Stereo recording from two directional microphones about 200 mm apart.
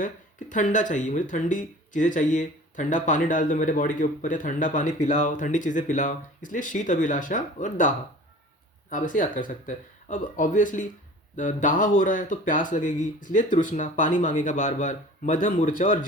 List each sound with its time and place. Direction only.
0.0 s speech: 40° left (ahead or behind)